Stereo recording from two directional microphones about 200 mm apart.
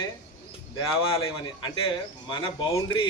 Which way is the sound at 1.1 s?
25° left (ahead or behind).